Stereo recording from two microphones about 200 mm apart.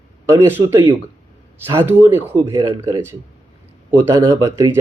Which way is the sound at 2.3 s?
25° right (ahead or behind).